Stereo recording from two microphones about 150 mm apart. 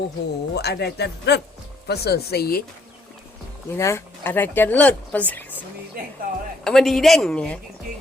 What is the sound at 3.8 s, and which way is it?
Speech, 20° left (ahead or behind).